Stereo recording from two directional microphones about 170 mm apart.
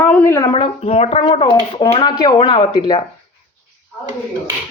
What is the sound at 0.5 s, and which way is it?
Speech, 35° left (ahead or behind).